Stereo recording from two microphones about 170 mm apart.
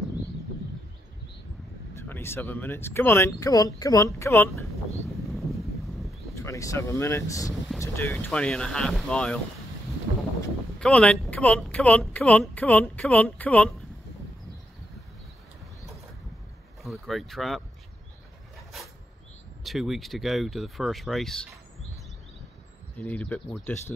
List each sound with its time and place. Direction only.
2.0 s speech: 15° left (ahead or behind)
5.3 s a sound: centre (ahead or behind)
6.3 s speech: 15° left (ahead or behind)
10.8 s speech: 5° left (ahead or behind)
16.8 s speech: centre (ahead or behind)
19.6 s speech: centre (ahead or behind)
22.9 s speech: 10° left (ahead or behind)